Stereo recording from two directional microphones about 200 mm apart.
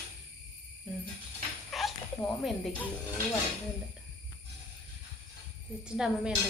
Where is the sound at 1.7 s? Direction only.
Centre (ahead or behind).